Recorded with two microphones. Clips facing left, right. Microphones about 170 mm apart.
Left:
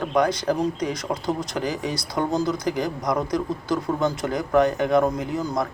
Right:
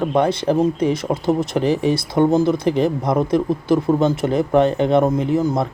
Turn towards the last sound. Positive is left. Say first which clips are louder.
# right 7 dB
turn(degrees=-25)  # may be behind; listen again after turning